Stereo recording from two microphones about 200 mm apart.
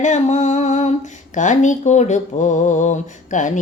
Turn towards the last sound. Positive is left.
turn(degrees=40)  # may be behind; listen again after turning